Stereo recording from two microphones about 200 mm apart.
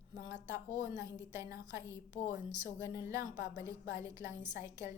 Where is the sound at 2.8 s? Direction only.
15° right (ahead or behind).